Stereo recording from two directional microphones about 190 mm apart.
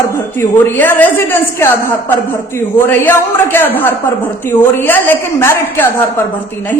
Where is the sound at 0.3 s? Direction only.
10° left (ahead or behind).